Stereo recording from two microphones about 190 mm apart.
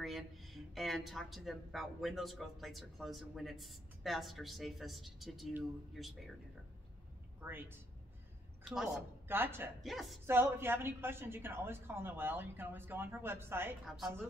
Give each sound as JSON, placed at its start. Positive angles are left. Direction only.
{"t": 0.0, "sound": "speech", "side_deg": 0}
{"t": 7.4, "sound": "a woman's voice", "side_deg": -10}
{"t": 9.3, "sound": "a woman's voice", "side_deg": -10}
{"t": 9.8, "sound": "speech", "side_deg": 0}
{"t": 10.2, "sound": "a woman's voice", "side_deg": -10}
{"t": 13.8, "sound": "speech", "side_deg": 0}